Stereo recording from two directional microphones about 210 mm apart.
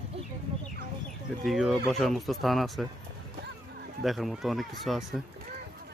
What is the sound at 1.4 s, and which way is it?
Speech, centre (ahead or behind).